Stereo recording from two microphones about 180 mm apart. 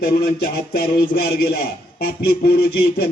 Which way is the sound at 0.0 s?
60° left (ahead or behind).